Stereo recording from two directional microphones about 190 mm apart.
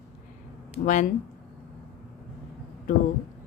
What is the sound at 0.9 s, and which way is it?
Speech, 40° left (ahead or behind).